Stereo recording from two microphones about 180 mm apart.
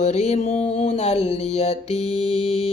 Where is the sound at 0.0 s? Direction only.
40° left (ahead or behind).